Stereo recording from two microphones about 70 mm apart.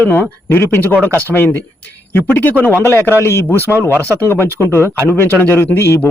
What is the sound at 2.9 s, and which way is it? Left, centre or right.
Speech, left.